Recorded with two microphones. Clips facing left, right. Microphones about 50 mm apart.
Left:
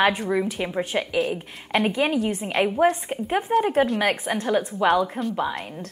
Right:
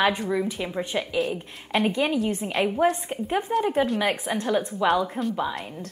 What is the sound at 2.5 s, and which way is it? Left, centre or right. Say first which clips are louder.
Speech: left 4 dB; centre.